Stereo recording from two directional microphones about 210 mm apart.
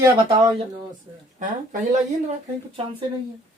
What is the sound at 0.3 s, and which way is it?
Speech, 25° right (ahead or behind).